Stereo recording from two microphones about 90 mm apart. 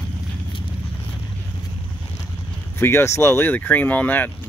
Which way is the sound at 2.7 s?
25° left (ahead or behind).